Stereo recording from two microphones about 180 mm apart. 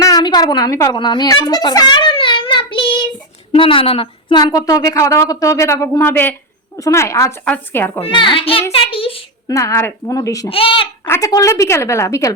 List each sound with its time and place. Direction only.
0.0 s a sound: 20° left (ahead or behind)
3.5 s a woman's voice: 30° left (ahead or behind); by 8.0 s 10° left (ahead or behind)
8.0 s a child's voice: 25° left (ahead or behind)
9.5 s a woman's voice: 15° left (ahead or behind)
10.5 s a child's voice: 30° left (ahead or behind)
11.0 s a woman's voice: 15° left (ahead or behind)